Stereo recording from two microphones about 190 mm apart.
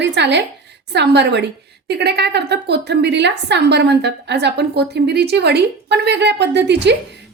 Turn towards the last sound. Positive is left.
turn(degrees=-65)  # may be behind; listen again after turning